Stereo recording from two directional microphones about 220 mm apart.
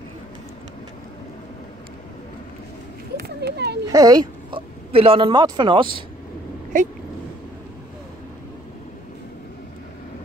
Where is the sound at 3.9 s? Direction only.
15° right (ahead or behind).